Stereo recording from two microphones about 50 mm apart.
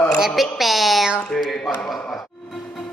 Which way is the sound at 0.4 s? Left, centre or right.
Centre.